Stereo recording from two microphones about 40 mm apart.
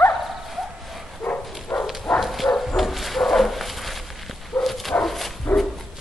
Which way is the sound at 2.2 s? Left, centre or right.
Centre.